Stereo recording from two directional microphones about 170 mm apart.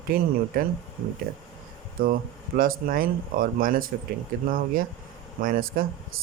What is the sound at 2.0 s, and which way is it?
Speech, 55° right (ahead or behind).